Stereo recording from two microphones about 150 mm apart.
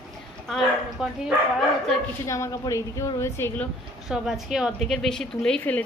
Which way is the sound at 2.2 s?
20° left (ahead or behind).